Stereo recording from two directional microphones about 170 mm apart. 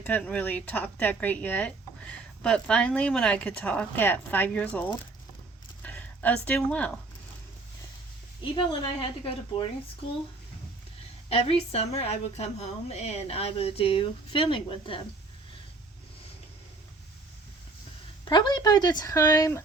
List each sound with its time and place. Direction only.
0.0 s speech: 5° left (ahead or behind)
8.5 s speech: 30° left (ahead or behind)
11.3 s a woman's voice: 35° left (ahead or behind)
18.3 s speech: 25° left (ahead or behind)